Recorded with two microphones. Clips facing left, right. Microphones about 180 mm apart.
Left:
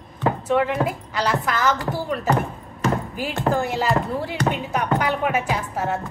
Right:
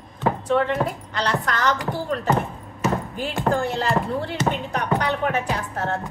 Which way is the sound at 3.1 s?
5° left (ahead or behind).